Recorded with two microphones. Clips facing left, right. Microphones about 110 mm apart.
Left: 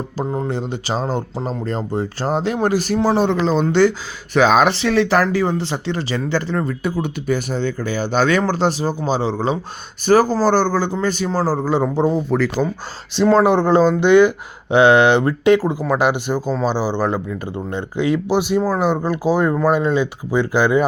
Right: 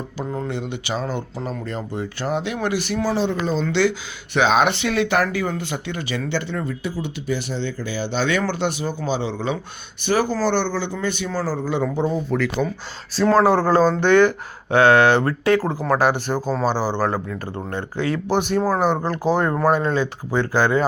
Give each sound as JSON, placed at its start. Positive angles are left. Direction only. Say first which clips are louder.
{"t": 0.4, "sound": "speech", "louder": "left 4 dB", "side_deg": 35}
{"t": 3.2, "sound": "speech", "louder": "left 5 dB", "side_deg": 70}
{"t": 3.7, "sound": "speech", "louder": "left 5 dB", "side_deg": 45}
{"t": 13.3, "sound": "speech", "louder": "left 2 dB", "side_deg": 20}